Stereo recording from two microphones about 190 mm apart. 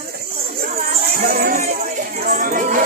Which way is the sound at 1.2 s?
50° right (ahead or behind).